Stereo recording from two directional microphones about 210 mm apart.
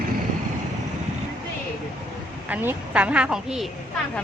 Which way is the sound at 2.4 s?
5° right (ahead or behind).